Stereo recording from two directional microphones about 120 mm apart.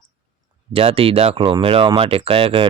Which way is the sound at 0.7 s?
50° right (ahead or behind).